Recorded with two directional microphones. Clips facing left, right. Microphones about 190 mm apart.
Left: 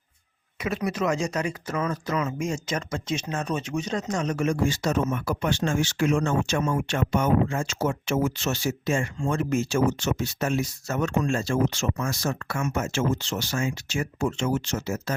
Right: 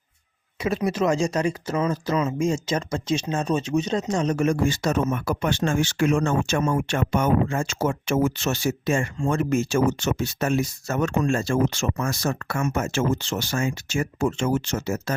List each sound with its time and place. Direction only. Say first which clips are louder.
0.6 s speech: right 4 dB; 30° right (ahead or behind)
4.4 s speech: right 3 dB; 50° right (ahead or behind)